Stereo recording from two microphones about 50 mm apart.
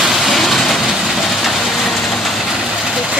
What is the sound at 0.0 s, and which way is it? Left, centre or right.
Rain, centre.